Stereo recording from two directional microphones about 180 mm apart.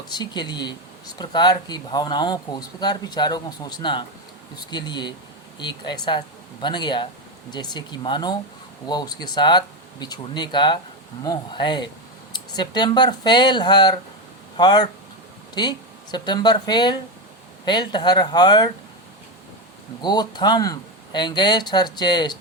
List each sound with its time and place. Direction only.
0.1 s speech: 25° left (ahead or behind)
16.1 s speech: 25° left (ahead or behind)
20.0 s speech: 25° left (ahead or behind)